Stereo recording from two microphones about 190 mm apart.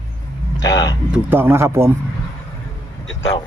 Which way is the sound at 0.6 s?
20° left (ahead or behind).